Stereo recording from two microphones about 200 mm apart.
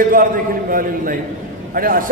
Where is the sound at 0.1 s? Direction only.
45° right (ahead or behind).